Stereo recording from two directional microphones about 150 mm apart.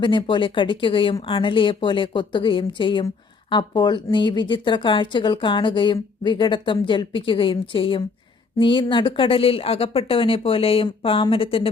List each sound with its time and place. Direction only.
0.0 s speech: 30° left (ahead or behind)